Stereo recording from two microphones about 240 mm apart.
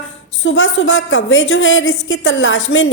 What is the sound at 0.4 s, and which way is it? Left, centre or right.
A woman's voice, left.